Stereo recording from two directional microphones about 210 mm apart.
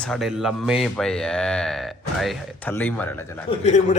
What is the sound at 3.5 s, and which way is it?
Speech, 30° left (ahead or behind).